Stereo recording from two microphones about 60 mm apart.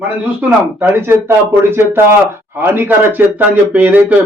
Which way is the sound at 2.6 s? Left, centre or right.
Right.